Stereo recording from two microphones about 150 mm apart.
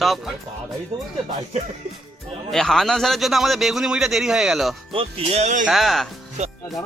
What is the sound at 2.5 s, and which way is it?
A man's voice, centre (ahead or behind).